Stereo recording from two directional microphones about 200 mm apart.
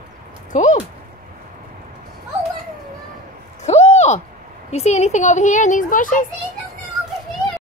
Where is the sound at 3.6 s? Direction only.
35° left (ahead or behind).